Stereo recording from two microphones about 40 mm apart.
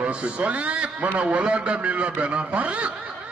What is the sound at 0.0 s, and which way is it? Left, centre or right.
A man's voice, right.